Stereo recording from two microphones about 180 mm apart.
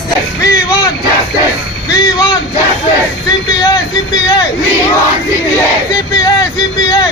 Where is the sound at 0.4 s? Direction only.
20° left (ahead or behind).